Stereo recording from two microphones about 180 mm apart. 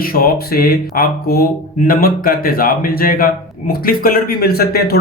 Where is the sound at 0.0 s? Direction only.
55° left (ahead or behind).